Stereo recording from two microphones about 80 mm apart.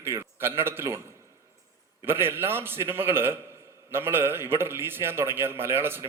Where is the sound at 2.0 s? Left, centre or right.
Right.